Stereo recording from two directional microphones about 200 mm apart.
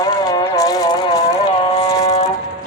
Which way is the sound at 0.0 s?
20° left (ahead or behind).